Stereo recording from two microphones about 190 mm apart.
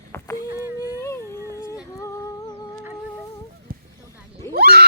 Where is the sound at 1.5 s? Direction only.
15° left (ahead or behind).